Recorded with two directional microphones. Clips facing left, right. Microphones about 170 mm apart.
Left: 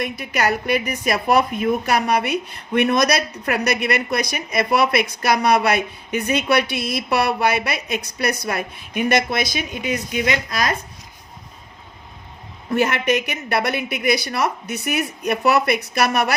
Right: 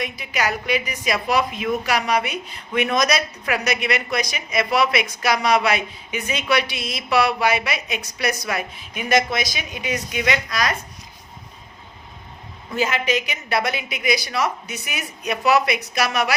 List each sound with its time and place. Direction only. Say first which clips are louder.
0.0 s a woman's voice: left 3 dB; 55° left (ahead or behind)
12.7 s a woman's voice: left 3 dB; 60° left (ahead or behind)